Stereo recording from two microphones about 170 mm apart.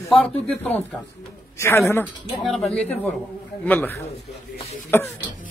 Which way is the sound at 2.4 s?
Centre (ahead or behind).